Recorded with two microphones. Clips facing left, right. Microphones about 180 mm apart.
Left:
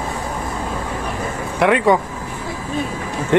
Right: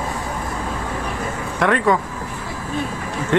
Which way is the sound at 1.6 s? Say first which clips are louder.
Left 3 dB; 15° left (ahead or behind).